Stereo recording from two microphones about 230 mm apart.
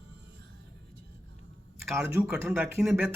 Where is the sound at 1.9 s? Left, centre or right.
Centre.